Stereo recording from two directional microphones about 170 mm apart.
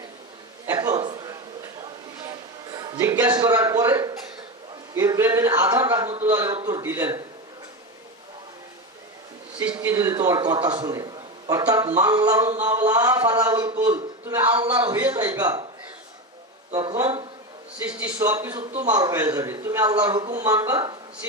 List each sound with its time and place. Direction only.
0.7 s a sound: 20° right (ahead or behind)
2.7 s a man's voice: 25° right (ahead or behind)
9.8 s a man's voice: 20° right (ahead or behind)
16.7 s a man's voice: 20° right (ahead or behind)
17.8 s a man's voice: 10° right (ahead or behind)
18.1 s a man's voice: 20° right (ahead or behind)
18.6 s a man's voice: 40° right (ahead or behind)
18.9 s a man's voice: 20° right (ahead or behind)